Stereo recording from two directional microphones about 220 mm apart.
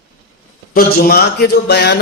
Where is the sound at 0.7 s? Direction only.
45° left (ahead or behind).